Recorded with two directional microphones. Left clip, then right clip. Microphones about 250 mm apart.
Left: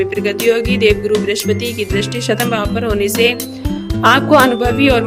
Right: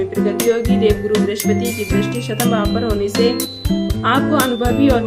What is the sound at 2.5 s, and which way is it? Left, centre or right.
Speech, left.